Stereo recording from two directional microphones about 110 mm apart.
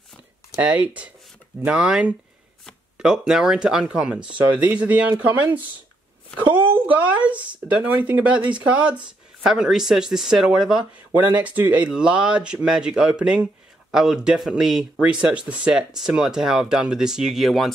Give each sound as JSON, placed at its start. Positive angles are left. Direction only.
{"t": 0.6, "sound": "speech", "side_deg": -15}